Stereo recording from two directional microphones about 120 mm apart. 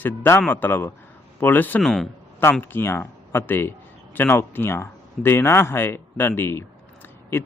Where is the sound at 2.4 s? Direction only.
20° left (ahead or behind).